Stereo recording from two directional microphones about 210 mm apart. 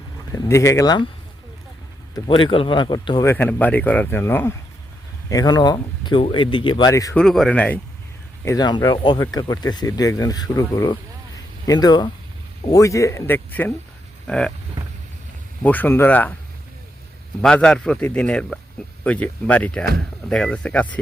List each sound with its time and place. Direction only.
0.3 s speech: 15° left (ahead or behind)
2.1 s speech: 25° left (ahead or behind)
7.2 s a man's voice: centre (ahead or behind)
8.4 s a man's voice: 20° left (ahead or behind)
15.6 s speech: 10° left (ahead or behind)
17.4 s a man's voice: 5° left (ahead or behind)